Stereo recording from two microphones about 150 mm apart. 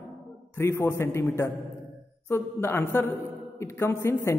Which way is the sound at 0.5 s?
15° left (ahead or behind).